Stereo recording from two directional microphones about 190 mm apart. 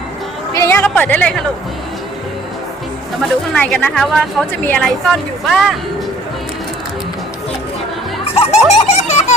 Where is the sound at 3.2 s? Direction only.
5° left (ahead or behind).